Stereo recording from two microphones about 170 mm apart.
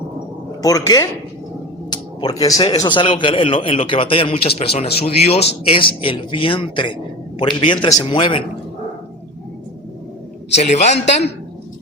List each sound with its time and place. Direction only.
0.6 s speech: 20° left (ahead or behind)
1.9 s a sound: 20° left (ahead or behind)
2.7 s a man's voice: 25° left (ahead or behind)
10.5 s a man's voice: 40° left (ahead or behind)